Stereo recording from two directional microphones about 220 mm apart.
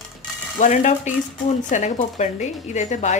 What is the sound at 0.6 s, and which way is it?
A woman's voice, 35° left (ahead or behind).